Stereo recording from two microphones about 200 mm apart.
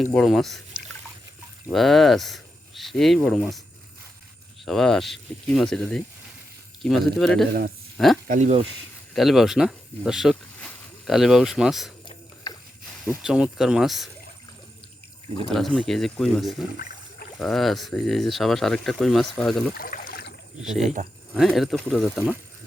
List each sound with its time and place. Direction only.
0.1 s speech: centre (ahead or behind)
4.6 s speech: centre (ahead or behind)
8.3 s speech: 35° right (ahead or behind)
9.1 s speech: centre (ahead or behind)
13.1 s speech: 5° right (ahead or behind)
15.5 s speech: centre (ahead or behind)
19.7 s a sound: 45° left (ahead or behind)
20.6 s speech: centre (ahead or behind)